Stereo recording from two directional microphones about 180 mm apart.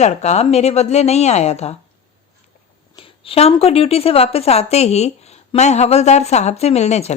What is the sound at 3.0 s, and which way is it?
Speech, 30° left (ahead or behind).